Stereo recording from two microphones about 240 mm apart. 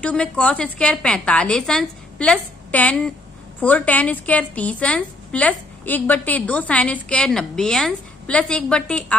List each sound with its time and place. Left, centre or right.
0.0 s a woman's voice: centre